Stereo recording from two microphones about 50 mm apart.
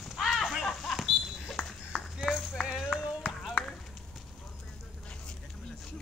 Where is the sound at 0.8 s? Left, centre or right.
Centre.